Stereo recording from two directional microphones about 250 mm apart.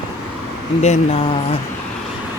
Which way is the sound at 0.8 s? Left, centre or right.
Left.